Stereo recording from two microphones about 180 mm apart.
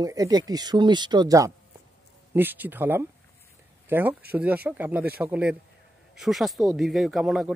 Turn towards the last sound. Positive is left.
turn(degrees=0)  # may be behind; listen again after turning